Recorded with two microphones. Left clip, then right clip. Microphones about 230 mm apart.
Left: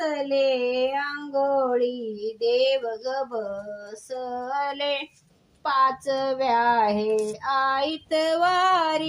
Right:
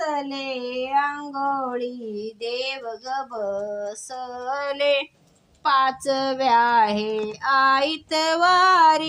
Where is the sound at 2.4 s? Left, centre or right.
Right.